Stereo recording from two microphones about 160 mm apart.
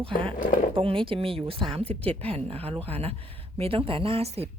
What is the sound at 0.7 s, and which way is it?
Speech, 35° right (ahead or behind).